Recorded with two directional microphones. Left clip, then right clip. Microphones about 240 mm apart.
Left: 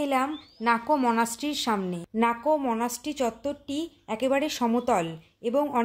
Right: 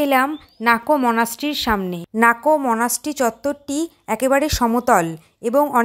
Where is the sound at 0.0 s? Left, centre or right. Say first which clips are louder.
Right 9 dB; right.